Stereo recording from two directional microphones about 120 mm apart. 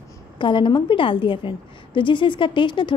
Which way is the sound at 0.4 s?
45° left (ahead or behind).